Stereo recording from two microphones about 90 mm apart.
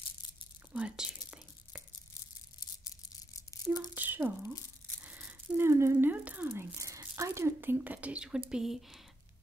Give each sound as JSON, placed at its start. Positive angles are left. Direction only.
{"t": 0.7, "sound": "speech", "side_deg": -10}
{"t": 3.6, "sound": "a sound", "side_deg": -20}
{"t": 6.5, "sound": "speech", "side_deg": -30}